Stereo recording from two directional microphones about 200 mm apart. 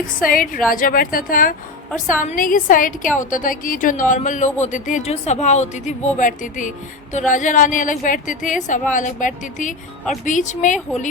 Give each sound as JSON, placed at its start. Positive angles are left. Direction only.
{"t": 0.2, "sound": "a woman's voice", "side_deg": 45}